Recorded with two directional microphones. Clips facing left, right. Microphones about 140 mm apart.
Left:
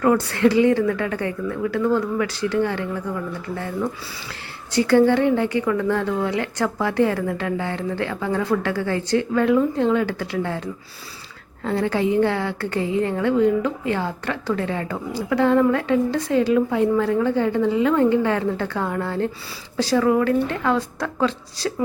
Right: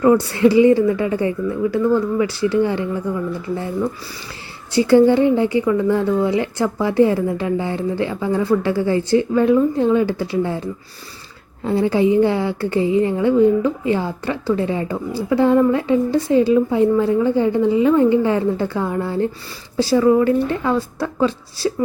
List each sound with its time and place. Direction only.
0.0 s a woman's voice: 10° right (ahead or behind)
4.7 s a woman's voice: 10° right (ahead or behind)
11.6 s a woman's voice: 10° right (ahead or behind)